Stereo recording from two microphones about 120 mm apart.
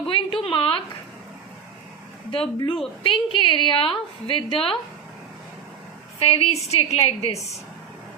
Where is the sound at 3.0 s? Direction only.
45° left (ahead or behind).